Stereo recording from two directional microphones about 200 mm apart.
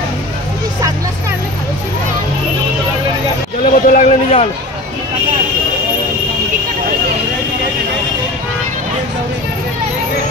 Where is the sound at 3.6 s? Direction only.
45° left (ahead or behind).